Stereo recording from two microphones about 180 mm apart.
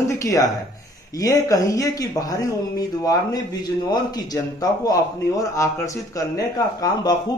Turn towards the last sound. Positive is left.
turn(degrees=20)  # may be behind; listen again after turning